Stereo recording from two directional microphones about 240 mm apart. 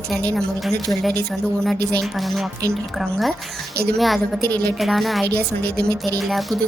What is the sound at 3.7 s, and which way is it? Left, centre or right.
Speech, right.